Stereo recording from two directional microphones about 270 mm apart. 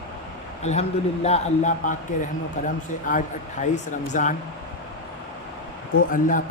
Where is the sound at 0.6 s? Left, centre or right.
Left.